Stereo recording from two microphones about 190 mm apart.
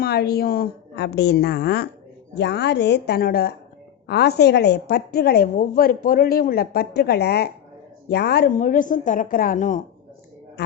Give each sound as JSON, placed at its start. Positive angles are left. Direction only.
{"t": 0.0, "sound": "a woman's voice", "side_deg": 55}
{"t": 2.3, "sound": "a woman's voice", "side_deg": 65}